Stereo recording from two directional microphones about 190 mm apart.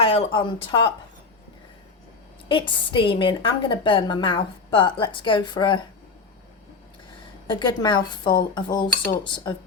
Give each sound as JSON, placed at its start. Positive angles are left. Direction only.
{"t": 0.0, "sound": "speech", "side_deg": 30}
{"t": 2.5, "sound": "a woman's voice", "side_deg": 25}
{"t": 7.4, "sound": "a woman's voice", "side_deg": 25}